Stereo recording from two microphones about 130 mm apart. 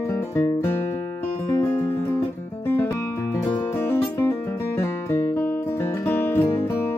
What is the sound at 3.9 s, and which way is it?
Music, 20° left (ahead or behind).